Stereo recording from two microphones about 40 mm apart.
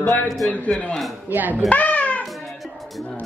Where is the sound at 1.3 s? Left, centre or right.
Right.